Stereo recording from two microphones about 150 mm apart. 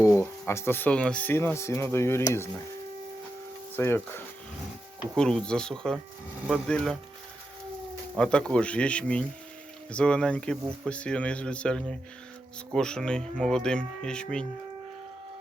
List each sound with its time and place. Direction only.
0.0 s speech: 20° left (ahead or behind)
3.8 s speech: 15° left (ahead or behind)
8.2 s speech: 5° left (ahead or behind)